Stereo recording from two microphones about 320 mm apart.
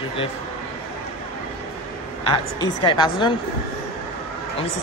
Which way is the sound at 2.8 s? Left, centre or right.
Centre.